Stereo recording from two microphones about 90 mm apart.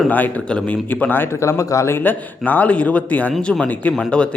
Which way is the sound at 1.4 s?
35° left (ahead or behind).